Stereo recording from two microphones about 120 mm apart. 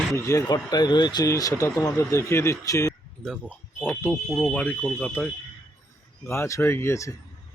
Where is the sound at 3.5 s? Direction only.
15° left (ahead or behind).